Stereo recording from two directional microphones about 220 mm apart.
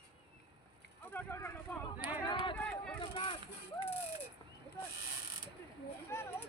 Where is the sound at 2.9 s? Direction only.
25° left (ahead or behind).